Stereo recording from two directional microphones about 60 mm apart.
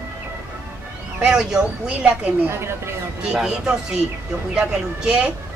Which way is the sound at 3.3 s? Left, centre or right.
Centre.